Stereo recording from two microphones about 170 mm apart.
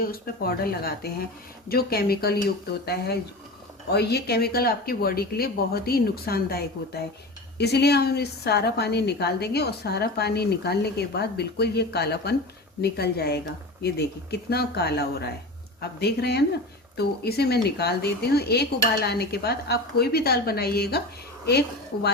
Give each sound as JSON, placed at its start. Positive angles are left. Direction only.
{"t": 0.0, "sound": "a woman's voice", "side_deg": 60}